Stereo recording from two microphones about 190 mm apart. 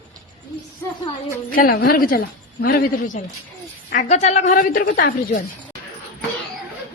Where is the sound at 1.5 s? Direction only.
50° left (ahead or behind).